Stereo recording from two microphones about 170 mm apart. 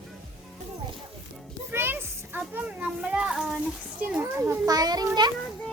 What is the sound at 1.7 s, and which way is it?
Children playing, 15° right (ahead or behind).